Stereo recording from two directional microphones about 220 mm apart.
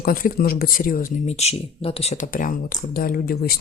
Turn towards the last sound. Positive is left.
turn(degrees=45)  # may be behind; listen again after turning